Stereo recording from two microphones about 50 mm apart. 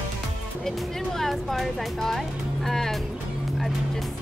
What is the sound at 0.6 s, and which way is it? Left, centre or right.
Speech, centre.